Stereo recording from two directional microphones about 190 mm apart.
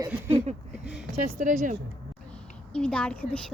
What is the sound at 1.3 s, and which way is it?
Speech, 40° right (ahead or behind).